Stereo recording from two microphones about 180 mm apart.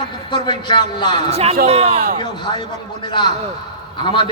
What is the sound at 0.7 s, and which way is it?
Speech, 25° left (ahead or behind).